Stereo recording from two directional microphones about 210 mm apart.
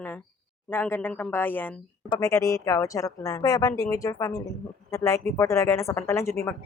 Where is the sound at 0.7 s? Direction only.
10° left (ahead or behind).